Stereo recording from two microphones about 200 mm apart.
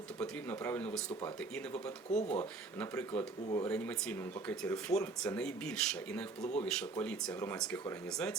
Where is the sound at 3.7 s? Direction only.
5° left (ahead or behind).